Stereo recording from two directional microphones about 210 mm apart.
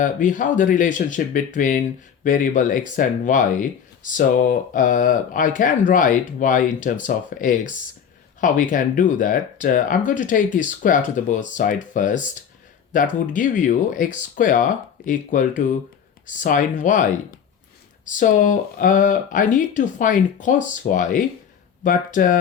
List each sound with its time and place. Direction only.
0.0 s speech: 40° left (ahead or behind)